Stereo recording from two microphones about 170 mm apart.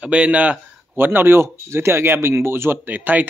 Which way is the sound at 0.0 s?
5° right (ahead or behind).